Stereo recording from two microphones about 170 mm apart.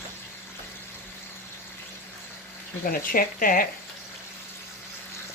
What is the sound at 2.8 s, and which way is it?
Speech, 55° left (ahead or behind).